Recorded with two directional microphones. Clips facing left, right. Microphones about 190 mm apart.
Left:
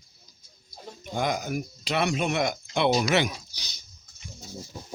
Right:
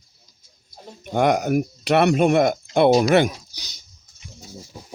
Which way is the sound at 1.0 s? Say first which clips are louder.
Right 9 dB; 65° right (ahead or behind).